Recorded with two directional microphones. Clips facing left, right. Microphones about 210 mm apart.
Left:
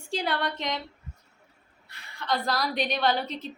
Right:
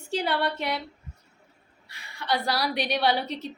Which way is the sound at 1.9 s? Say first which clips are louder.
Right 1 dB; 10° right (ahead or behind).